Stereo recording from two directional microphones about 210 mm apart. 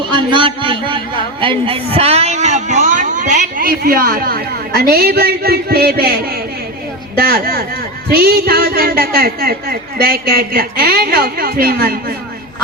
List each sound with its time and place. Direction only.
0.1 s a man's voice: 25° right (ahead or behind); by 12.1 s 45° right (ahead or behind)